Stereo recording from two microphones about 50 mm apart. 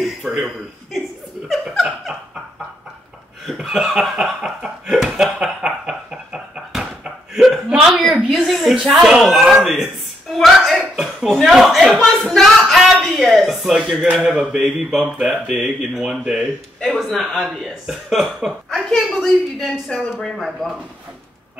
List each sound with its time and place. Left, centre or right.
0.0 s a sound: centre
2.1 s dog: centre
3.6 s chuckle: centre
4.2 s a sound: centre
7.3 s chuckle: centre
8.5 s speech: centre
10.3 s a sound: centre
11.0 s cough: centre
11.4 s speech: centre
12.4 s a sound: centre
14.2 s speech: centre
16.8 s speech: centre
18.7 s a woman's voice: centre
19.9 s speech: centre